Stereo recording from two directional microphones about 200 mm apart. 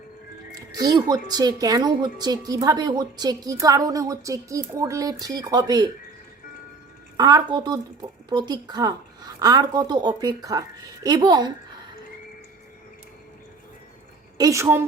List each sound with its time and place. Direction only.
0.5 s speech: 20° right (ahead or behind)
7.2 s speech: 20° right (ahead or behind)
14.3 s a woman's voice: 15° right (ahead or behind)